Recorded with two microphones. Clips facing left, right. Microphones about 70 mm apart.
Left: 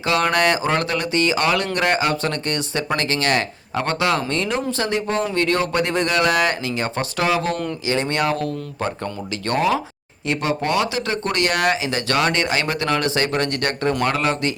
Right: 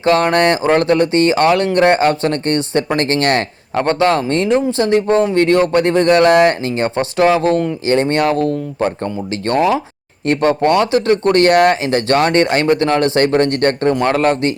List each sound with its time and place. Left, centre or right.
0.0 s speech: right
6.9 s speech: right
10.2 s speech: right